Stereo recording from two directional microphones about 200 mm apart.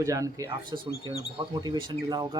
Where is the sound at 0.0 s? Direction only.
15° right (ahead or behind).